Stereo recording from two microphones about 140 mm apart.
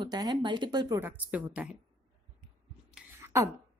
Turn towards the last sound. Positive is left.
turn(degrees=-20)  # may be behind; listen again after turning